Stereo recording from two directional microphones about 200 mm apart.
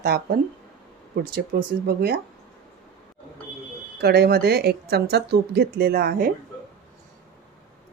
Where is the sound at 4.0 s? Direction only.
55° right (ahead or behind).